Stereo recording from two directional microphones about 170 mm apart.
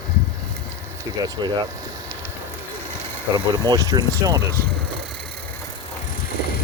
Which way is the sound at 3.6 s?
25° right (ahead or behind).